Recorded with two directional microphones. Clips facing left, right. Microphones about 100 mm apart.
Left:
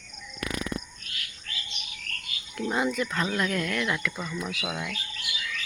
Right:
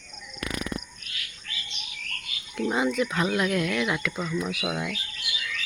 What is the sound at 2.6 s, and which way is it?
Speech, centre (ahead or behind).